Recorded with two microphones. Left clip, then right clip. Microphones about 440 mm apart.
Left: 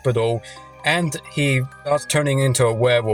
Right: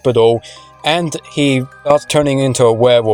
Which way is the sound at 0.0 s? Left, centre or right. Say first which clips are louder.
Right 10 dB; left.